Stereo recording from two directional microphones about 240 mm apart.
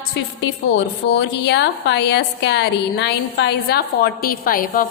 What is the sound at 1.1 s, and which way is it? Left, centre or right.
A woman's voice, left.